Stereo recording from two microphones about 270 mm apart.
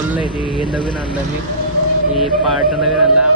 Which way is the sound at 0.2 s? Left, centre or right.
Centre.